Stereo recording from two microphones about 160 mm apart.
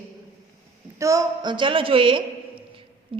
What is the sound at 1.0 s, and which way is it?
A woman's voice, 20° right (ahead or behind).